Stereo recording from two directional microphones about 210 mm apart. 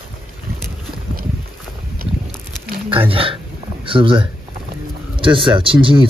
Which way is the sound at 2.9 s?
25° right (ahead or behind).